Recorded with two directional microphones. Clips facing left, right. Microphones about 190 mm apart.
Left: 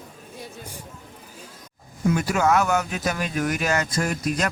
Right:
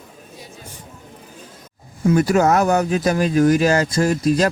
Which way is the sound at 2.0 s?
40° right (ahead or behind).